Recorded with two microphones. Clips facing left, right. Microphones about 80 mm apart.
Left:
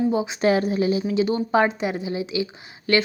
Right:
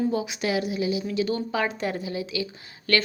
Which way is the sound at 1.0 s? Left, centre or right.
Left.